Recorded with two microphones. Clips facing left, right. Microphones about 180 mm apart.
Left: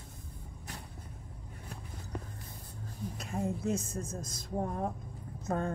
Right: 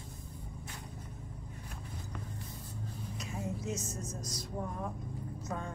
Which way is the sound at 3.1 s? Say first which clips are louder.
Left 5 dB; 55° left (ahead or behind).